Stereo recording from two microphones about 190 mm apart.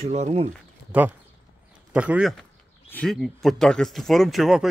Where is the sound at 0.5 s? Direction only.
10° right (ahead or behind).